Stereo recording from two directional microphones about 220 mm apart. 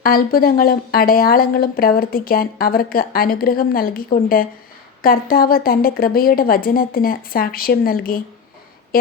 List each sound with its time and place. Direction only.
0.0 s speech: 40° left (ahead or behind)